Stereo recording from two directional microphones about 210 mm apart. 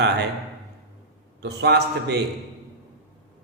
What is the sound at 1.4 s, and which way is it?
Speech, 50° right (ahead or behind).